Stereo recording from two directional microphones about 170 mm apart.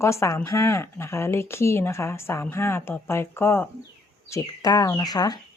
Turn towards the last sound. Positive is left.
turn(degrees=25)  # may be behind; listen again after turning